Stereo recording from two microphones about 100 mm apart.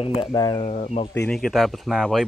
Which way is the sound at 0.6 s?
75° left (ahead or behind).